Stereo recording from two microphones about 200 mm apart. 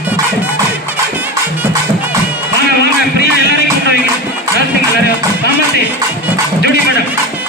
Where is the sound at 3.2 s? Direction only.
50° left (ahead or behind).